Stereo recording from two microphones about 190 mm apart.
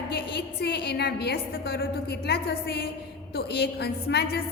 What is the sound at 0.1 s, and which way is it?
A woman's voice, 60° left (ahead or behind).